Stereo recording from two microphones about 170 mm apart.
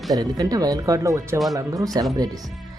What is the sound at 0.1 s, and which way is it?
Speech, 20° right (ahead or behind).